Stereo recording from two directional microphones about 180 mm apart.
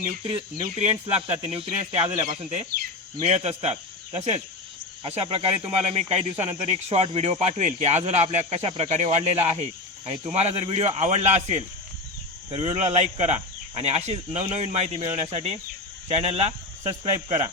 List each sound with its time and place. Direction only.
0.3 s speech: 25° right (ahead or behind)
0.8 s speech: 35° right (ahead or behind)